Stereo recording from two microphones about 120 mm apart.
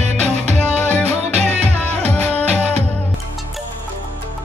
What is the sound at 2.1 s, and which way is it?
Music, 15° left (ahead or behind).